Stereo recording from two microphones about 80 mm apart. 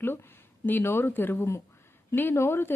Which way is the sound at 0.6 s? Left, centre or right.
Left.